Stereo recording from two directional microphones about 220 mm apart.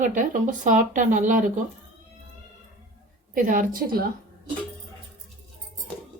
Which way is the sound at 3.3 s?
35° right (ahead or behind).